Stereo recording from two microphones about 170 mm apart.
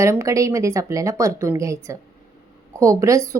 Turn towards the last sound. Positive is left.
turn(degrees=-20)  # may be behind; listen again after turning